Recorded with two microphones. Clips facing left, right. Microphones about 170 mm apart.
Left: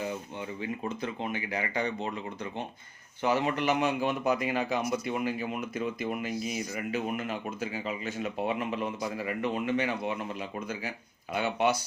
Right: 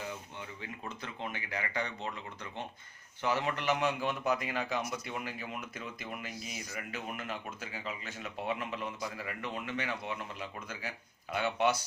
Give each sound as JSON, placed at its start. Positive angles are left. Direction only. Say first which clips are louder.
{"t": 0.6, "sound": "speech", "louder": "left 11 dB", "side_deg": 15}